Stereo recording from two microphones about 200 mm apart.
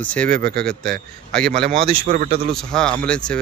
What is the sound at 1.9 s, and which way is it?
Speech, 45° right (ahead or behind).